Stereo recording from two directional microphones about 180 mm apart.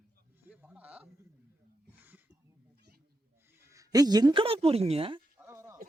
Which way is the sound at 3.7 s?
20° right (ahead or behind).